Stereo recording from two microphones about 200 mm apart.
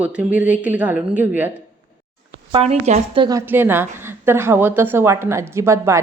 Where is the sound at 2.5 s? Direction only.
30° right (ahead or behind).